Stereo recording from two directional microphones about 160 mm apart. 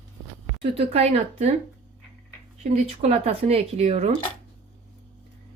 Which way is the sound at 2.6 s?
45° right (ahead or behind).